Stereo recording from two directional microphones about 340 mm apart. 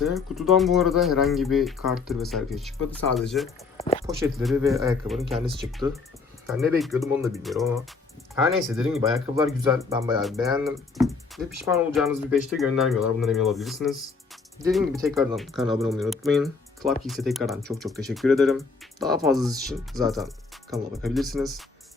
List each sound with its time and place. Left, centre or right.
0.0 s speech: centre
3.8 s a sound: centre
4.0 s speech: centre
6.5 s speech: centre